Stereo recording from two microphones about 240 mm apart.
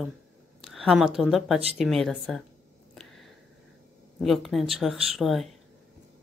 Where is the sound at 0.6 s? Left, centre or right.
Centre.